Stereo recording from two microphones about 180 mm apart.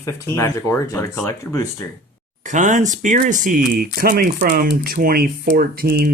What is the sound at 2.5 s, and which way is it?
Speech, 45° right (ahead or behind).